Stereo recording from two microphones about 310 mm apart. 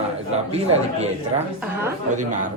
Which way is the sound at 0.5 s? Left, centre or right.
Centre.